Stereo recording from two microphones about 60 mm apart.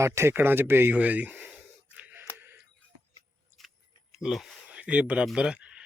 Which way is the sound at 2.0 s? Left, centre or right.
Right.